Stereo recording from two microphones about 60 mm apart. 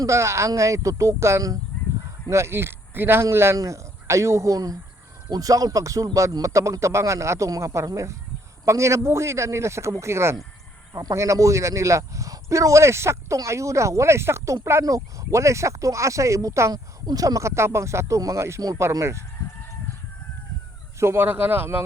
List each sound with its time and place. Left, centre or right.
0.0 s a man's voice: right
10.9 s speech: right
11.2 s speech: right
16.7 s a man's voice: right
21.0 s a man's voice: right
21.2 s speech: right